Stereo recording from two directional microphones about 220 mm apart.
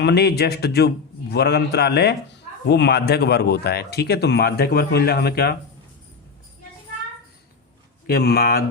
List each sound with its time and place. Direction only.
0.0 s speech: 50° left (ahead or behind)
8.0 s speech: 45° left (ahead or behind)